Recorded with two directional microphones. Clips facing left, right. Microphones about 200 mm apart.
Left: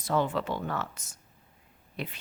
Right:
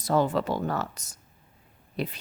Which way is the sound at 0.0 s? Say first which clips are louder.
Right 4 dB; 40° right (ahead or behind).